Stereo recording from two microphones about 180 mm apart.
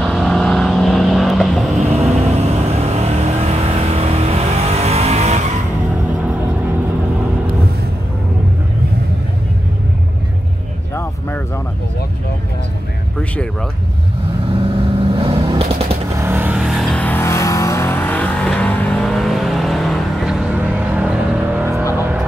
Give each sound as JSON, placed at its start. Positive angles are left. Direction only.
{"t": 0.0, "sound": "vehicle", "side_deg": 0}
{"t": 1.8, "sound": "vehicle", "side_deg": -35}
{"t": 11.0, "sound": "a sound", "side_deg": 10}
{"t": 15.1, "sound": "a sound", "side_deg": -30}
{"t": 16.2, "sound": "vehicle", "side_deg": -10}
{"t": 21.9, "sound": "music", "side_deg": -10}